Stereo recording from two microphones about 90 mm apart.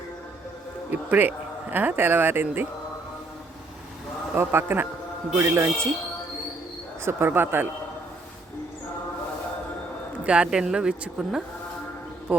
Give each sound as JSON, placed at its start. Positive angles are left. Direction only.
{"t": 0.9, "sound": "speech", "side_deg": -20}
{"t": 4.4, "sound": "speech", "side_deg": -25}
{"t": 7.0, "sound": "speech", "side_deg": -25}
{"t": 10.2, "sound": "a woman's voice", "side_deg": -10}